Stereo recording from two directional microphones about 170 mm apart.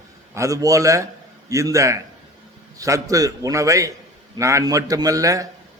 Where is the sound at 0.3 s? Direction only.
20° right (ahead or behind).